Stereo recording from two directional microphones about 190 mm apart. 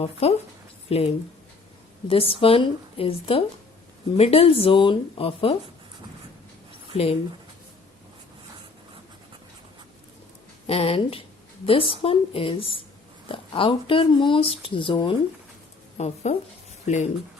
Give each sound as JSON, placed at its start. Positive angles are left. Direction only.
{"t": 0.0, "sound": "a woman's voice", "side_deg": 30}
{"t": 6.9, "sound": "speech", "side_deg": 30}
{"t": 10.7, "sound": "a woman's voice", "side_deg": 30}